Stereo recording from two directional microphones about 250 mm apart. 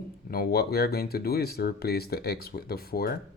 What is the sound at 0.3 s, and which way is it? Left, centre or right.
Speech, left.